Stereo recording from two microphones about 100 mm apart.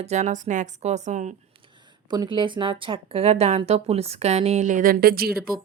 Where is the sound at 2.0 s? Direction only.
45° right (ahead or behind); by 4.6 s 90° right.